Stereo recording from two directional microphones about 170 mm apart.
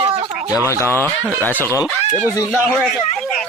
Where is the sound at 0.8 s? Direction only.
15° left (ahead or behind).